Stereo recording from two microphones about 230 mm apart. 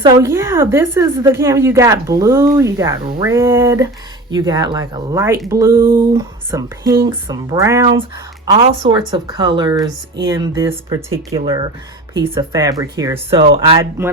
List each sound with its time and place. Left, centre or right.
0.0 s a woman's voice: centre